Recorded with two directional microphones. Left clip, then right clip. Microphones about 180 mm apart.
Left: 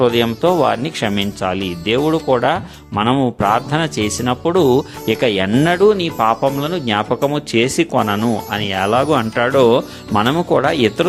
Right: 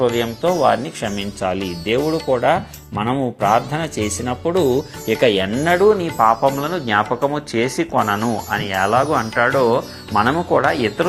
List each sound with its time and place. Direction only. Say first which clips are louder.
0.0 s speech: left 3 dB; 35° left (ahead or behind)
5.5 s speech: left 3 dB; 50° left (ahead or behind)